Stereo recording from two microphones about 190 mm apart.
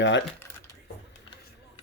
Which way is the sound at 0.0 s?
70° left (ahead or behind).